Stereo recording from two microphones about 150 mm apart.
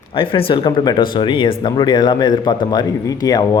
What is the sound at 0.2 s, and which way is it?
Speech, 35° left (ahead or behind).